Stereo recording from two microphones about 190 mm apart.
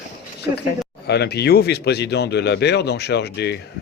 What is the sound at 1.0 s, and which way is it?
A woman's voice, 60° left (ahead or behind).